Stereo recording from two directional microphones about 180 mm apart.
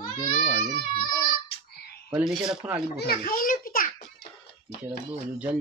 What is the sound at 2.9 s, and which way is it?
Children playing, 55° left (ahead or behind).